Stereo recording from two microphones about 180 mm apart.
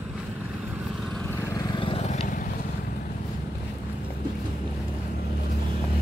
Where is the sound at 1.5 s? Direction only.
25° left (ahead or behind); by 2.4 s 45° left (ahead or behind).